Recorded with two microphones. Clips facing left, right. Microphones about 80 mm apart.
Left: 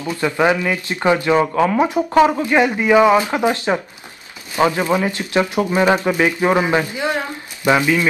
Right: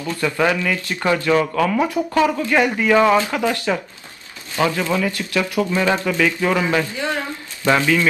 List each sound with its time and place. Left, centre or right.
0.0 s speech: centre